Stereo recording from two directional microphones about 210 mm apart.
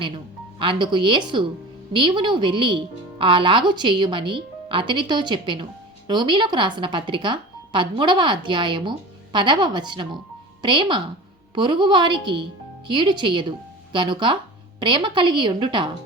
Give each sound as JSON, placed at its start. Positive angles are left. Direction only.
{"t": 0.6, "sound": "speech", "side_deg": -25}